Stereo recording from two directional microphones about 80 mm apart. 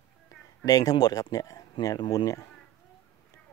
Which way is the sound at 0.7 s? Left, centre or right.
Left.